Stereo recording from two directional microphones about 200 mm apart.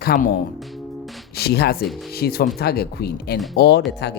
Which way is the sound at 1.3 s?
50° left (ahead or behind).